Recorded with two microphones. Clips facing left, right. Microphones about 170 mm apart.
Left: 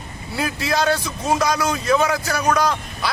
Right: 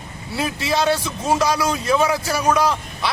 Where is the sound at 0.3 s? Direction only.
Centre (ahead or behind).